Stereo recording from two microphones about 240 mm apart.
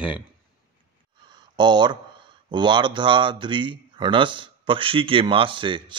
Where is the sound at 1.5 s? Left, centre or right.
Centre.